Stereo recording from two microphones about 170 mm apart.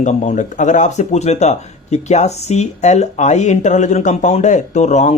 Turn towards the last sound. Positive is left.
turn(degrees=45)  # may be behind; listen again after turning